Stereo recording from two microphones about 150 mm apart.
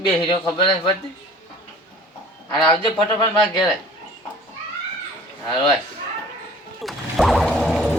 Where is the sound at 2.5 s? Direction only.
30° left (ahead or behind).